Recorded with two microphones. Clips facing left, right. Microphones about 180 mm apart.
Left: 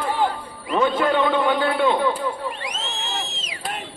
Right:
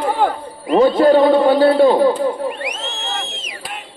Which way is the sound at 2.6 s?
60° right (ahead or behind).